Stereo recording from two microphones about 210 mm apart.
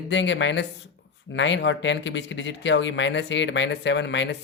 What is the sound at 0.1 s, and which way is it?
Speech, 60° left (ahead or behind).